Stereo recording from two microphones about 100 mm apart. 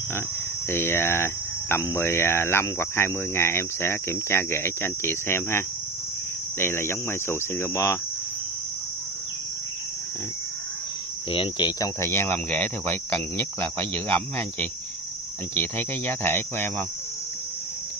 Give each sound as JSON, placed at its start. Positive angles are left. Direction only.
{"t": 0.7, "sound": "speech", "side_deg": 25}
{"t": 11.3, "sound": "speech", "side_deg": 55}
{"t": 11.8, "sound": "speech", "side_deg": 25}